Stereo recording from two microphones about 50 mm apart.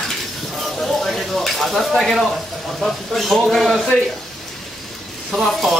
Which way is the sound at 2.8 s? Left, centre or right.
Centre.